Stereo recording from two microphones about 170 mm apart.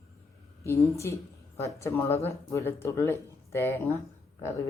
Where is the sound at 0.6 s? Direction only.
15° left (ahead or behind).